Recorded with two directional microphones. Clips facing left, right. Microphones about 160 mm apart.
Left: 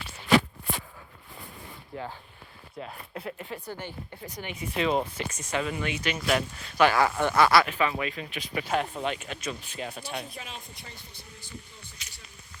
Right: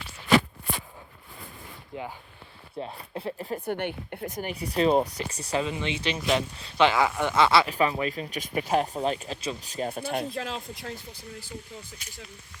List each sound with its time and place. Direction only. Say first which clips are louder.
1.9 s speech: right 1 dB; 20° right (ahead or behind)
2.7 s speech: right 4 dB; 30° right (ahead or behind)
3.7 s speech: right 8 dB; 60° right (ahead or behind); by 5.6 s 35° right (ahead or behind)
5.6 s speech: right 1 dB; 25° right (ahead or behind)
7.7 s speech: right 3 dB; 35° right (ahead or behind)
10.3 s speech: right 9 dB; 90° right